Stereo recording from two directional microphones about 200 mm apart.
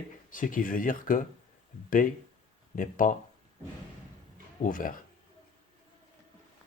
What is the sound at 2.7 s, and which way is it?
Speech, 40° left (ahead or behind).